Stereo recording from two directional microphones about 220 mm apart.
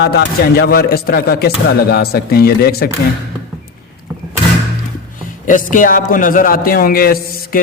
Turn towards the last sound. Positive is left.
turn(degrees=40)  # may be behind; listen again after turning